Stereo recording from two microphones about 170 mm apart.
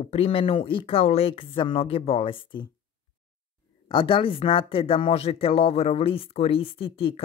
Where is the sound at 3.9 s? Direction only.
30° left (ahead or behind).